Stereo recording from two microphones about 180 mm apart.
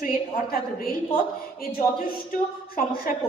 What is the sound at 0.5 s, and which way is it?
Speech, 55° left (ahead or behind).